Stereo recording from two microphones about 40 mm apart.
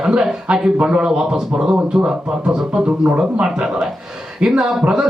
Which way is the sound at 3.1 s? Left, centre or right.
Right.